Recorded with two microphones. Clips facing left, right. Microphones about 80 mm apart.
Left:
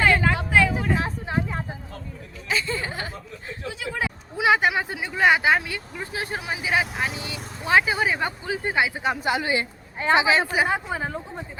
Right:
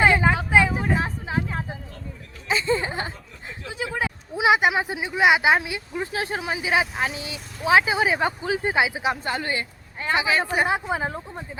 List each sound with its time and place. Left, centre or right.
0.0 s vehicle: centre
0.9 s vehicle: centre
2.5 s a sound: right
4.4 s speech: centre
6.0 s speech: right
7.1 s speech: left
7.6 s speech: centre
9.2 s speech: centre
10.0 s speech: left
10.4 s speech: centre